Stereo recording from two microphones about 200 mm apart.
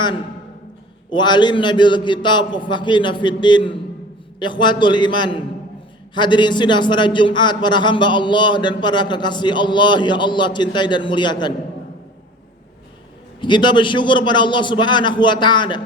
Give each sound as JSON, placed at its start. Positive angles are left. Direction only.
{"t": 1.1, "sound": "a man's voice", "side_deg": 20}
{"t": 13.4, "sound": "a man's voice", "side_deg": 25}